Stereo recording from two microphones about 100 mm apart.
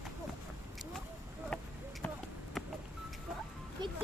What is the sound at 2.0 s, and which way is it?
Basketball bounce, 15° left (ahead or behind).